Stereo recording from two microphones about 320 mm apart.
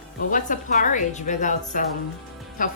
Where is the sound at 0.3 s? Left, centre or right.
Left.